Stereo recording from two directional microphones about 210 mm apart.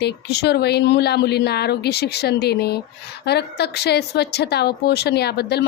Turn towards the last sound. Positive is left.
turn(degrees=50)  # may be behind; listen again after turning